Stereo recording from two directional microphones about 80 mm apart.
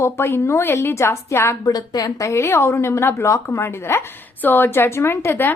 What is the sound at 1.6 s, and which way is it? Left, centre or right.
A woman's voice, left.